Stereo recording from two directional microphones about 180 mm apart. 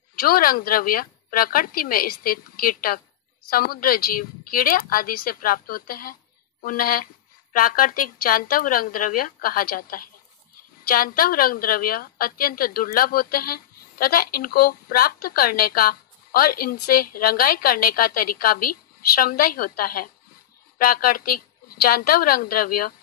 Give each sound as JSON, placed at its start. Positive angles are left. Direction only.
{"t": 0.2, "sound": "a woman's voice", "side_deg": 55}